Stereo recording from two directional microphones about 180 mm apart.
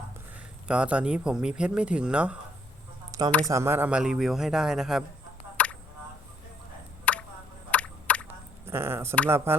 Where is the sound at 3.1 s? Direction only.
20° right (ahead or behind).